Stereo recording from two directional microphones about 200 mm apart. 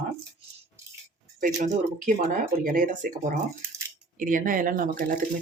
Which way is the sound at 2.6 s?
45° right (ahead or behind).